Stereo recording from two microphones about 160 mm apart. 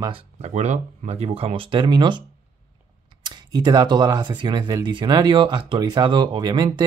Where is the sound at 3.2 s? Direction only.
25° right (ahead or behind).